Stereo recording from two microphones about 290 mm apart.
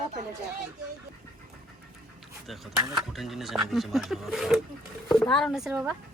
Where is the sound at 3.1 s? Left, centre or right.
Centre.